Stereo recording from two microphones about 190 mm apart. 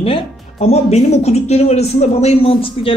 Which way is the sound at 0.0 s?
30° left (ahead or behind).